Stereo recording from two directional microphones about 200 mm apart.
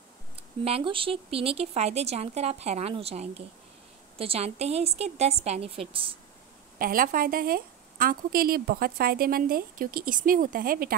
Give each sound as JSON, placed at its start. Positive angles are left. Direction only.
{"t": 0.7, "sound": "speech", "side_deg": -25}
{"t": 6.8, "sound": "a woman's voice", "side_deg": -45}